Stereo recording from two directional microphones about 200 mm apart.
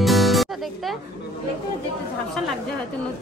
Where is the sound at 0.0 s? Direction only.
Centre (ahead or behind).